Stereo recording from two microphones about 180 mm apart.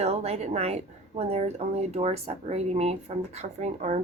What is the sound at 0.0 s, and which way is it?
A woman's voice, 35° right (ahead or behind).